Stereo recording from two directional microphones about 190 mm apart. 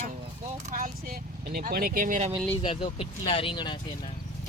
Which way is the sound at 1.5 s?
50° right (ahead or behind).